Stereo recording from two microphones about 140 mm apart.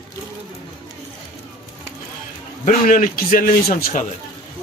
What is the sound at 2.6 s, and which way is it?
A man's voice, 80° left.